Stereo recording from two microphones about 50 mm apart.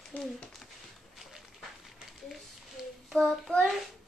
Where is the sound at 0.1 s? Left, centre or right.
Left.